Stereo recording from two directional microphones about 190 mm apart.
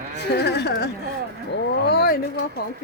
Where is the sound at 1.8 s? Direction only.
55° left (ahead or behind).